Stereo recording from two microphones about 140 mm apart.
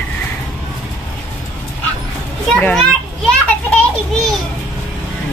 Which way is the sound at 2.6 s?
10° left (ahead or behind).